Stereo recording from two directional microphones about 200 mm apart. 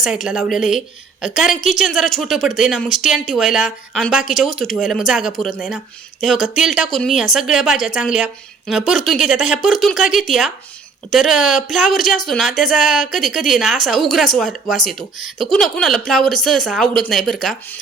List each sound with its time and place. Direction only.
0.0 s speech: centre (ahead or behind)
9.1 s speech: 35° left (ahead or behind)
9.4 s speech: centre (ahead or behind)